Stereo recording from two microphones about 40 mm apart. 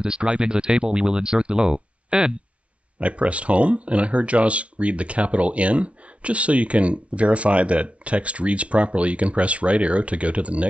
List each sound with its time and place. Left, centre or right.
0.0 s speech: right